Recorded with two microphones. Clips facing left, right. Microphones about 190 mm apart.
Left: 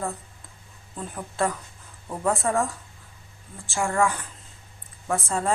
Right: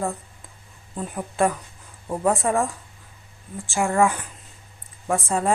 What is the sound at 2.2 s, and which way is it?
A woman's voice, 15° right (ahead or behind).